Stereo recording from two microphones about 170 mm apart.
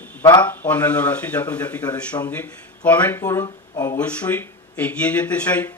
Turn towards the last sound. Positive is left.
turn(degrees=10)  # may be behind; listen again after turning